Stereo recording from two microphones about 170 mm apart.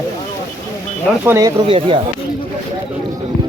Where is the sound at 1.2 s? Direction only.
15° right (ahead or behind).